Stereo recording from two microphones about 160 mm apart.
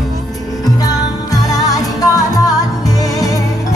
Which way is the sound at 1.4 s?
25° left (ahead or behind).